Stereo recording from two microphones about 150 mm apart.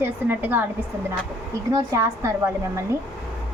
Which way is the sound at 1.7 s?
20° right (ahead or behind).